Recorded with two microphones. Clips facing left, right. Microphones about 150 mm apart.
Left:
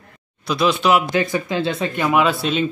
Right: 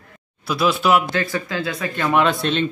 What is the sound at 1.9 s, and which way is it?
Speech, 10° left (ahead or behind).